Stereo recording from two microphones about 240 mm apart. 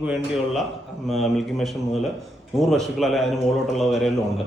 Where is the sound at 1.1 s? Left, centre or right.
Centre.